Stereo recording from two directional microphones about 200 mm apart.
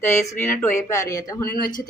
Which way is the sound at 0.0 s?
15° left (ahead or behind).